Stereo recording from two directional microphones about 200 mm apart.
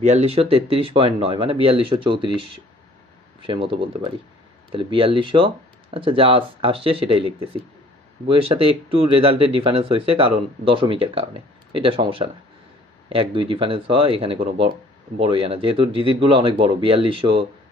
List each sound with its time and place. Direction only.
0.0 s speech: 35° right (ahead or behind)
3.4 s speech: 25° right (ahead or behind)
9.0 s speech: 25° right (ahead or behind)